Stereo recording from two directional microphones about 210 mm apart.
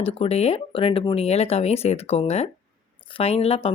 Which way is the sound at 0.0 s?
30° left (ahead or behind).